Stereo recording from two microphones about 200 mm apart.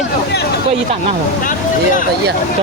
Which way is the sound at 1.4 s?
40° left (ahead or behind).